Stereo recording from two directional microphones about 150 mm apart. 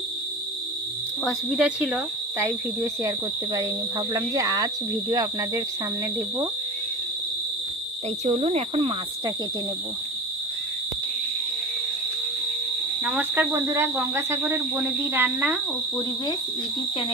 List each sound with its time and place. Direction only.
1.2 s speech: centre (ahead or behind)
2.4 s cricket: 20° right (ahead or behind)
8.2 s speech: 45° right (ahead or behind)
13.1 s speech: 10° right (ahead or behind)